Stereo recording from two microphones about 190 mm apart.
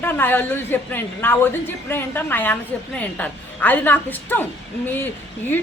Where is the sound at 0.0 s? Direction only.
10° left (ahead or behind).